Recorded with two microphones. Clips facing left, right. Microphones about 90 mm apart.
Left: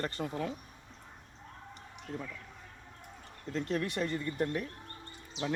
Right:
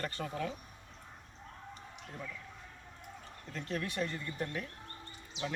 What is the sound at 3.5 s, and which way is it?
Speech, 35° left (ahead or behind).